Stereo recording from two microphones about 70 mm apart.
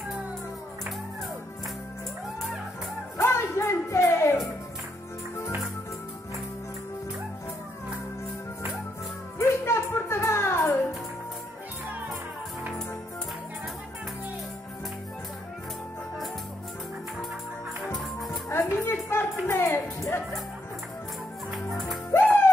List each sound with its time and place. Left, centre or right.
3.2 s music: left
9.5 s music: left
18.5 s music: left
22.1 s music: left